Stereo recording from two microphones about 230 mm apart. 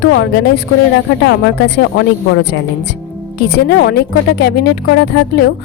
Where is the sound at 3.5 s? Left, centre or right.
Left.